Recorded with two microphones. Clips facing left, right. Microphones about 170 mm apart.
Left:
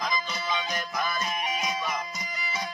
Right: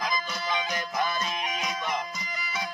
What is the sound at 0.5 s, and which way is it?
Music, 15° right (ahead or behind).